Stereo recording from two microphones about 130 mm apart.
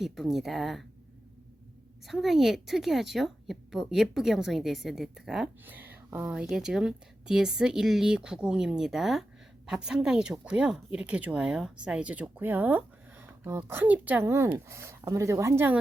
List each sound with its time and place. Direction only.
0.0 s a woman's voice: centre (ahead or behind)
2.0 s a woman's voice: centre (ahead or behind)
5.6 s a woman's voice: 15° right (ahead or behind)